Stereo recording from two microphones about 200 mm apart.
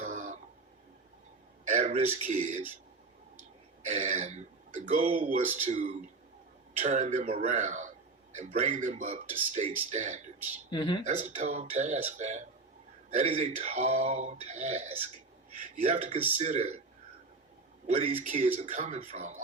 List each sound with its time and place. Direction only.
0.0 s a sound: 35° right (ahead or behind)
1.6 s a sound: 40° right (ahead or behind)
3.8 s speech: 35° right (ahead or behind)
10.7 s speech: 25° left (ahead or behind)
11.0 s speech: 35° right (ahead or behind)
17.8 s speech: 30° right (ahead or behind)